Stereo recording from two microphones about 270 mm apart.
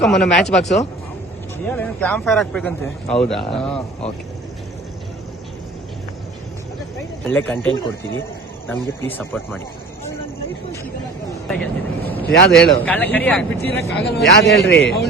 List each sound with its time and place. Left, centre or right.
0.0 s a man's voice: centre
7.3 s a man's voice: centre
9.0 s a man's voice: centre
11.4 s a man's voice: centre
14.6 s a man's voice: left